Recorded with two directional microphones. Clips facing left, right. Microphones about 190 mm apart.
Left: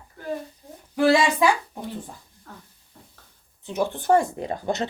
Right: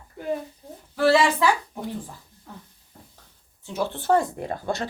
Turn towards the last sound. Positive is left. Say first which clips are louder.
# left 2 dB
turn(degrees=20)  # may be behind; listen again after turning